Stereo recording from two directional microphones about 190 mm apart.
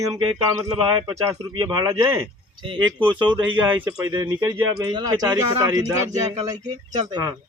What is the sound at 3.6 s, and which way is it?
Speech, 10° right (ahead or behind).